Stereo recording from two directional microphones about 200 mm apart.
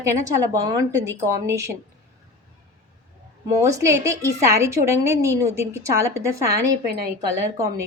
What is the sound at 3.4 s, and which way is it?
A woman's voice, 15° right (ahead or behind).